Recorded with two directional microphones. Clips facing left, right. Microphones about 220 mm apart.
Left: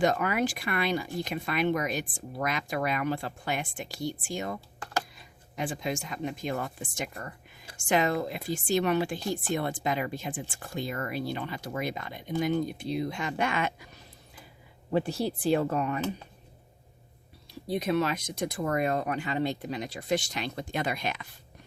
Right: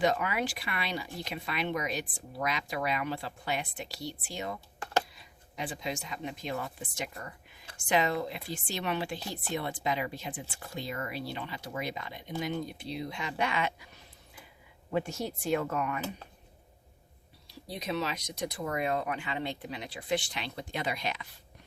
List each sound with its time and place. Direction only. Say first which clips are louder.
0.0 s speech: left 3 dB; 45° left (ahead or behind)
14.8 s speech: left 4 dB; 35° left (ahead or behind)
17.7 s speech: left 7 dB; 55° left (ahead or behind)